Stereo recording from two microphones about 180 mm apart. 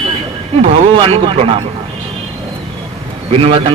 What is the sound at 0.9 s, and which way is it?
Speech, 30° right (ahead or behind).